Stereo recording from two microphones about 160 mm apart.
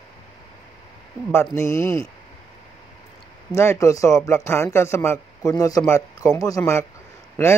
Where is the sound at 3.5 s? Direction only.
20° left (ahead or behind).